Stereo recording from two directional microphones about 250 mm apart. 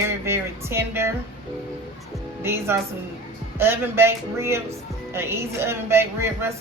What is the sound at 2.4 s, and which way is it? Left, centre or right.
Speech, centre.